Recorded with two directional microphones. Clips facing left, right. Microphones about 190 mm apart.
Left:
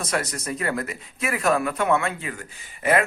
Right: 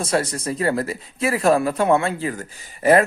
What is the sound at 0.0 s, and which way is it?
Speech, 30° right (ahead or behind).